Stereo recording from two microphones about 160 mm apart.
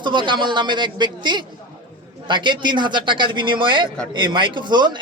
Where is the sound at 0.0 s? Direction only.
30° right (ahead or behind).